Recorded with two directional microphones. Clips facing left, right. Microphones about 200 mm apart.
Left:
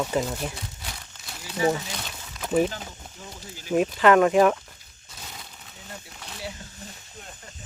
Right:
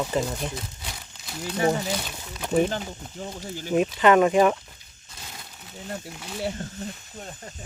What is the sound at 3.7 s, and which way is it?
Speech, centre (ahead or behind).